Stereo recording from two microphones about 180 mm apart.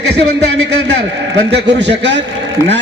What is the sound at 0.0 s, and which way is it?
Speech, 65° right (ahead or behind).